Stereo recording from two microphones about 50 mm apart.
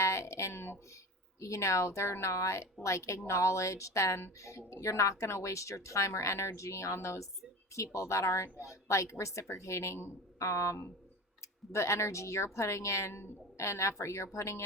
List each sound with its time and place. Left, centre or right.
0.0 s a sound: left
1.4 s a woman's voice: left
8.5 s speech: left
9.6 s a woman's voice: left